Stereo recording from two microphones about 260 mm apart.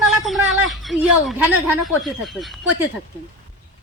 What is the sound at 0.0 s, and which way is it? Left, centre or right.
A man's voice, centre.